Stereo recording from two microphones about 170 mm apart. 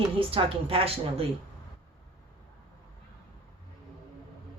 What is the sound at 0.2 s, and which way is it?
Speech, 35° right (ahead or behind).